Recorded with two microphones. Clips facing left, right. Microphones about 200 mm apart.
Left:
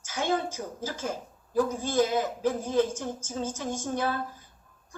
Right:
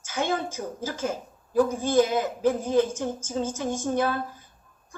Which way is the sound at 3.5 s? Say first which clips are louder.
Right 4 dB; 55° right (ahead or behind).